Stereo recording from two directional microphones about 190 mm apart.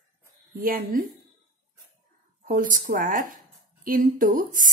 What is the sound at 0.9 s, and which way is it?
Speech, 45° right (ahead or behind).